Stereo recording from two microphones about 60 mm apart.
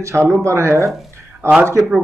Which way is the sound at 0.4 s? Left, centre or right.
Right.